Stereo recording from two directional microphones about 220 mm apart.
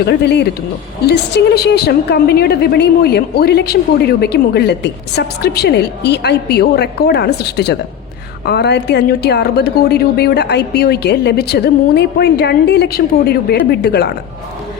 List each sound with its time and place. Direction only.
0.0 s a woman's voice: 50° left (ahead or behind)